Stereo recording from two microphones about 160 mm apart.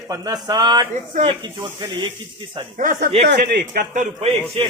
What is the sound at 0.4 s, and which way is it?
Speech, 25° right (ahead or behind).